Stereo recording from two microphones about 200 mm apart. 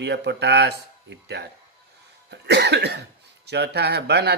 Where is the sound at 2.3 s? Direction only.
60° right (ahead or behind).